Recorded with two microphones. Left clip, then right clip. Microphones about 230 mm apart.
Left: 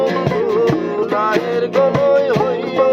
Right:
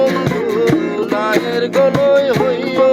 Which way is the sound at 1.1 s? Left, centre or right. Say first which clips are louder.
Right 1 dB; right.